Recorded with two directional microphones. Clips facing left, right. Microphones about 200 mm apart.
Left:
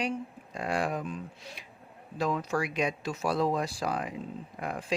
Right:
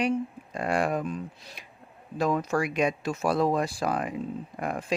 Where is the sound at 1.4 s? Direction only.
35° right (ahead or behind).